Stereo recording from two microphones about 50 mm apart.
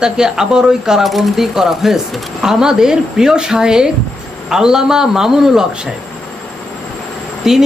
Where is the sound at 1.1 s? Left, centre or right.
Centre.